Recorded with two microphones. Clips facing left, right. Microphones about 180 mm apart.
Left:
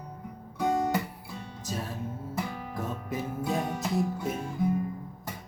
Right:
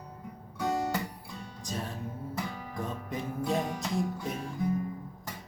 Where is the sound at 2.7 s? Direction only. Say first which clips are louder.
Left 2 dB; 5° left (ahead or behind).